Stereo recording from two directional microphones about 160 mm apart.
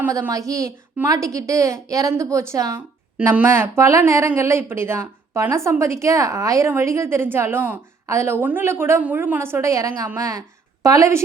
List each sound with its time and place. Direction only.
0.0 s a woman's voice: 20° right (ahead or behind)